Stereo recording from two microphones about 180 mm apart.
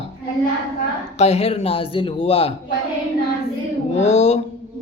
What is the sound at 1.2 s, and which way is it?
Speech, 35° left (ahead or behind).